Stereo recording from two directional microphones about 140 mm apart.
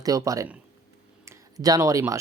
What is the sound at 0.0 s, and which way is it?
Speech, 25° right (ahead or behind).